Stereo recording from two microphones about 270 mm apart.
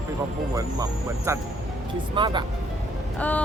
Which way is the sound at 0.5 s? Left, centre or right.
Centre.